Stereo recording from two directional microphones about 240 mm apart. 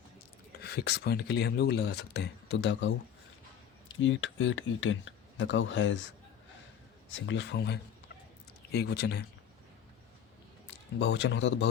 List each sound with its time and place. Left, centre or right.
0.6 s speech: left
10.7 s a man's voice: left